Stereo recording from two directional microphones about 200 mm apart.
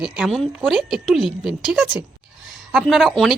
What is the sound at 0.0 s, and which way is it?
Speech, centre (ahead or behind).